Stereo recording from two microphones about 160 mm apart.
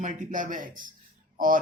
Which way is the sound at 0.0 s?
50° right (ahead or behind).